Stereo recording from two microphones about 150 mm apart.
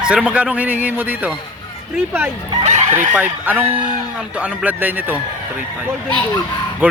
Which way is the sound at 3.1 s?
10° right (ahead or behind).